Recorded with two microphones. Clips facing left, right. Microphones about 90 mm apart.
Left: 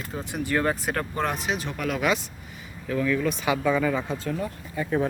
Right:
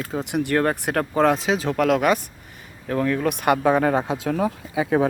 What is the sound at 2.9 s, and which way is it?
Speech, 50° right (ahead or behind).